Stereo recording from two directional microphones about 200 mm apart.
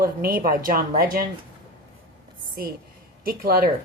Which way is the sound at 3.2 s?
45° right (ahead or behind).